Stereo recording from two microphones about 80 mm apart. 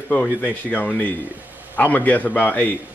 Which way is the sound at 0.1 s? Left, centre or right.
Centre.